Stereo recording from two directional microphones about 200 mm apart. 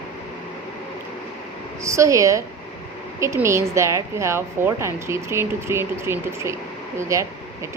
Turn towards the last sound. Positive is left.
turn(degrees=-15)  # may be behind; listen again after turning